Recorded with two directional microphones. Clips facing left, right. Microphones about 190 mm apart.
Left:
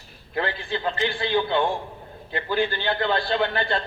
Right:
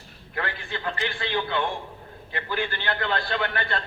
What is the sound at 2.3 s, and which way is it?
A man's voice, 25° left (ahead or behind).